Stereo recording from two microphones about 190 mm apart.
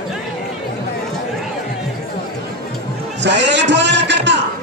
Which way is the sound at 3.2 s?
70° right (ahead or behind).